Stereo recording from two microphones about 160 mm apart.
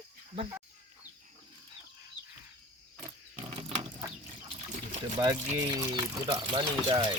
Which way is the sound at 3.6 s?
40° right (ahead or behind).